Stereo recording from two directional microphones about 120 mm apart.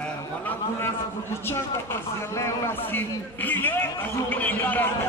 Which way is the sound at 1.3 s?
20° left (ahead or behind).